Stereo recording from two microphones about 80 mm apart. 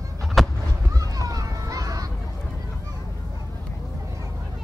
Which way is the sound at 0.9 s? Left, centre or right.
Right.